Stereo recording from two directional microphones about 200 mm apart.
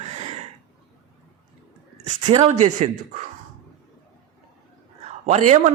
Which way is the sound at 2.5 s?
35° right (ahead or behind).